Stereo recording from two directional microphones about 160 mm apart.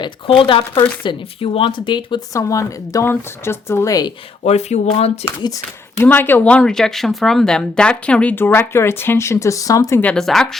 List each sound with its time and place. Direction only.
0.0 s speech: 35° left (ahead or behind)
4.4 s speech: 45° left (ahead or behind)
6.0 s speech: 15° left (ahead or behind)
10.0 s speech: 5° left (ahead or behind)